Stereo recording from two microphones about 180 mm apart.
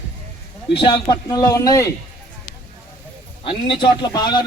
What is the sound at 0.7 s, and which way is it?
A man's voice, 30° left (ahead or behind).